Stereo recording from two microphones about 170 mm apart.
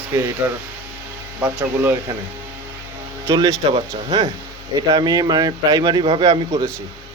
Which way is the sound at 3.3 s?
20° right (ahead or behind).